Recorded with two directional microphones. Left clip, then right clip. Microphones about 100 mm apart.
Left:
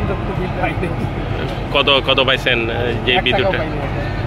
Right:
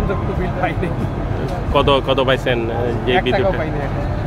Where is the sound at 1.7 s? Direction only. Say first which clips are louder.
Left 1 dB; 35° right (ahead or behind).